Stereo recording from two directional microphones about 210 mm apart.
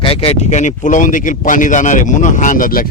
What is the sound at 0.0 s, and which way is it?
Speech, 25° left (ahead or behind).